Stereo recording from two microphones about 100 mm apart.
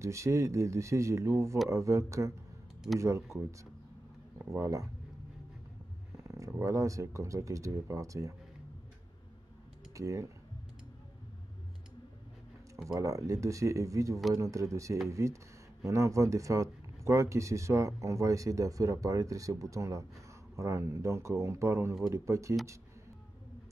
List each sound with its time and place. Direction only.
0.0 s speech: 30° right (ahead or behind)
4.5 s speech: 30° right (ahead or behind)
6.2 s a sound: 35° right (ahead or behind)
6.6 s speech: 30° right (ahead or behind)
9.9 s speech: 30° right (ahead or behind)
12.8 s speech: 35° right (ahead or behind)